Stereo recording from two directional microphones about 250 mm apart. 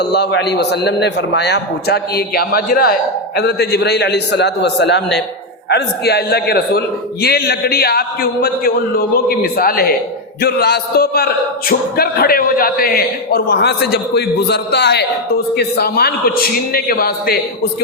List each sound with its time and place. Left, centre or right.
0.0 s a man's voice: left